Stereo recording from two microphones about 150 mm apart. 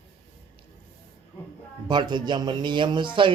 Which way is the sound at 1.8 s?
30° right (ahead or behind).